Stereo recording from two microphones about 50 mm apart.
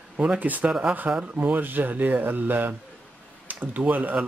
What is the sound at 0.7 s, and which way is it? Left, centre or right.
Speech, right.